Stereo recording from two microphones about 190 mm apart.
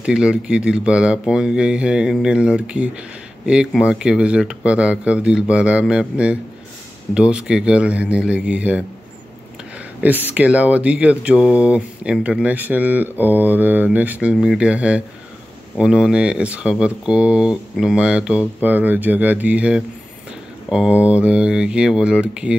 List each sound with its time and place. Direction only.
0.0 s speech: 5° right (ahead or behind)